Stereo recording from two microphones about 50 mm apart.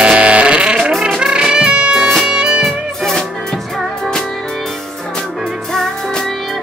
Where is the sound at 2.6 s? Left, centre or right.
Centre.